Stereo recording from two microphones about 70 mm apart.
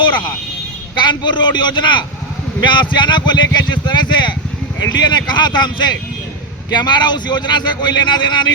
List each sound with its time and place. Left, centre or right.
0.9 s speech: left